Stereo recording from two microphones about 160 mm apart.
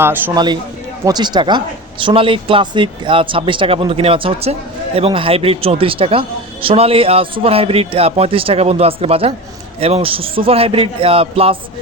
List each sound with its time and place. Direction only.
0.0 s speech: 10° right (ahead or behind)
0.3 s a man's voice: 25° right (ahead or behind)